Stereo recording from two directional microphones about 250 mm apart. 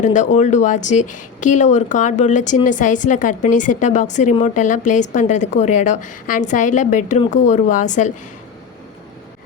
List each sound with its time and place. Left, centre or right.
0.0 s speech: left